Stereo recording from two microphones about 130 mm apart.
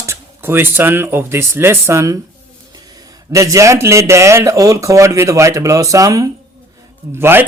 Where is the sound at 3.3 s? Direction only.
25° right (ahead or behind).